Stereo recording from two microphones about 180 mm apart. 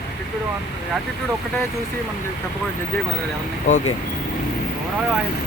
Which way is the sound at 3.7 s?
40° left (ahead or behind).